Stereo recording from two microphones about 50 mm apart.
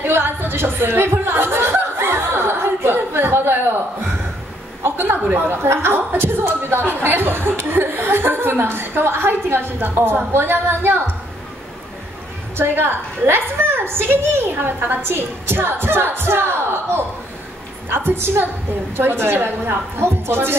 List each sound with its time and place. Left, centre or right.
0.0 s chuckle: right
4.8 s a woman's voice: right
12.5 s a woman's voice: right